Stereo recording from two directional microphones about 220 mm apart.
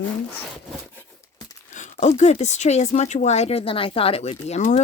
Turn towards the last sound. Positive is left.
turn(degrees=30)  # may be behind; listen again after turning